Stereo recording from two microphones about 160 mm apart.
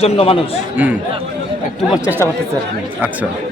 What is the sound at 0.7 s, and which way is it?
A man's voice, 10° right (ahead or behind).